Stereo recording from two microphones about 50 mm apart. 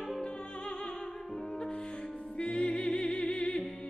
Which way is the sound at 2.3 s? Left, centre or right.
Left.